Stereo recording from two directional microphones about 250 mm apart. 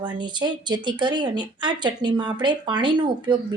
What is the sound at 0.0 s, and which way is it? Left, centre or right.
A woman's voice, centre.